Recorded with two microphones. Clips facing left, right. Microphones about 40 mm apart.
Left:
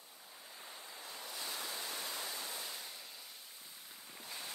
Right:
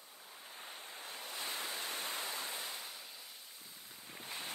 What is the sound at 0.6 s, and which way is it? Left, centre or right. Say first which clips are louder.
Waves: right 2 dB; right.